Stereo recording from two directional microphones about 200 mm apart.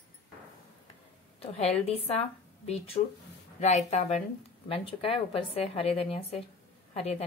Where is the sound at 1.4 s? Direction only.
30° left (ahead or behind).